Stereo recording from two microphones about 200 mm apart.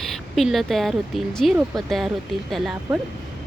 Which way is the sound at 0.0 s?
Centre (ahead or behind).